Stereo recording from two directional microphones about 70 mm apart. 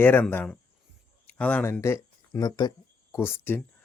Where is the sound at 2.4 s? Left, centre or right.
Left.